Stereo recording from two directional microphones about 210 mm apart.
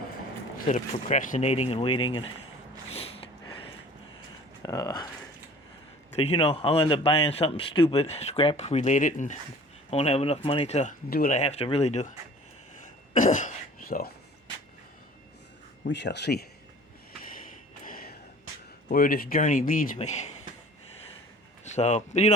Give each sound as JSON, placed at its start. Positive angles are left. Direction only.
{"t": 0.7, "sound": "speech", "side_deg": 35}
{"t": 4.6, "sound": "speech", "side_deg": 15}
{"t": 6.1, "sound": "a man's voice", "side_deg": 30}
{"t": 12.8, "sound": "throat clearing", "side_deg": 35}
{"t": 15.8, "sound": "speech", "side_deg": 55}
{"t": 17.8, "sound": "a sound", "side_deg": 45}
{"t": 18.9, "sound": "a man's voice", "side_deg": 40}
{"t": 21.6, "sound": "speech", "side_deg": 35}